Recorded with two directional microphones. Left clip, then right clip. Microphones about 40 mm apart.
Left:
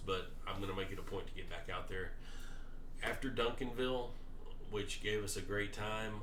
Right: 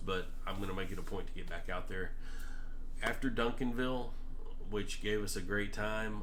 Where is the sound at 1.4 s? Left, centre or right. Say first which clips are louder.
Right 3 dB; right.